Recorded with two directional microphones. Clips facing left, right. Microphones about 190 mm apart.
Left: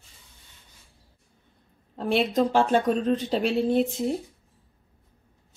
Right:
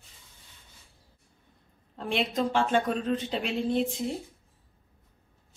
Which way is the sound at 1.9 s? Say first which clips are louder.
Left 6 dB; 40° left (ahead or behind).